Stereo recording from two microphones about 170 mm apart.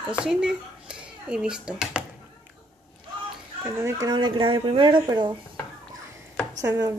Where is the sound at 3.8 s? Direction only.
20° right (ahead or behind).